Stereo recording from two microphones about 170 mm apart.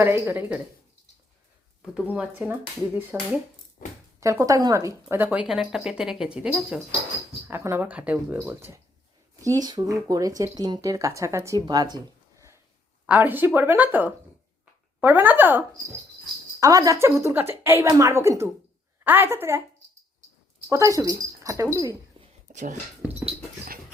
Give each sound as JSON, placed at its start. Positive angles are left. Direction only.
{"t": 0.0, "sound": "speech", "side_deg": -15}
{"t": 1.8, "sound": "speech", "side_deg": -5}
{"t": 3.8, "sound": "speech", "side_deg": 55}
{"t": 4.2, "sound": "speech", "side_deg": -20}
{"t": 7.4, "sound": "speech", "side_deg": -15}
{"t": 13.1, "sound": "speech", "side_deg": -10}
{"t": 20.7, "sound": "speech", "side_deg": -20}
{"t": 22.5, "sound": "speech", "side_deg": -50}